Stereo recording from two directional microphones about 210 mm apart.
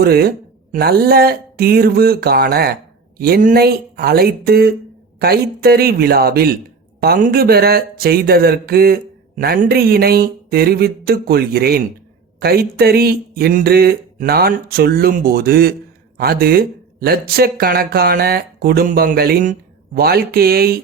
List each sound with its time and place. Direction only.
0.0 s speech: 45° right (ahead or behind)